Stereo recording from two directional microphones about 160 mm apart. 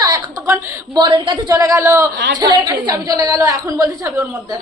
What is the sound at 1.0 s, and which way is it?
A woman's voice, 30° right (ahead or behind).